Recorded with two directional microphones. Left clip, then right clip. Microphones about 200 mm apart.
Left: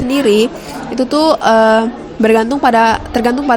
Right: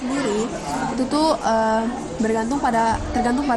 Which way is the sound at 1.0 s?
25° left (ahead or behind).